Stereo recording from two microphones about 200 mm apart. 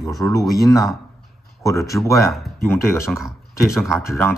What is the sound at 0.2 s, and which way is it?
Speech, 15° left (ahead or behind).